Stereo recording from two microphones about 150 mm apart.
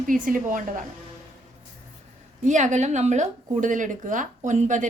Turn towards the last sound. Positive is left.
turn(degrees=-55)  # may be behind; listen again after turning